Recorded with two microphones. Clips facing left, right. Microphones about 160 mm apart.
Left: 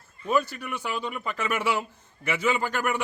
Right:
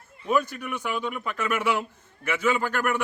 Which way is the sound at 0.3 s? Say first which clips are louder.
Even; 5° left (ahead or behind).